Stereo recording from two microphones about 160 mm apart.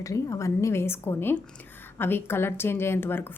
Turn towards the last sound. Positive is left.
turn(degrees=15)  # may be behind; listen again after turning